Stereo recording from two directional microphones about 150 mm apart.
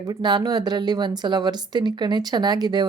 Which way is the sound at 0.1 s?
30° right (ahead or behind).